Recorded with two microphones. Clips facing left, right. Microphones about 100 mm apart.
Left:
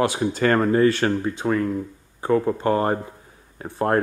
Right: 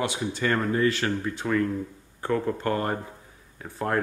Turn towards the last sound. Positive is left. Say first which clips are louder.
# left 6 dB
turn(degrees=40)  # may be behind; listen again after turning